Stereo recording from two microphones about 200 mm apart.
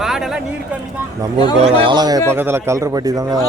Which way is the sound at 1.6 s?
25° right (ahead or behind).